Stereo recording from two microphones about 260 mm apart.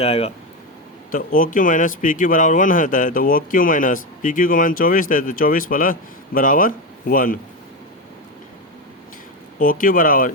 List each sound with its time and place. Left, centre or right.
0.0 s speech: left
9.6 s speech: left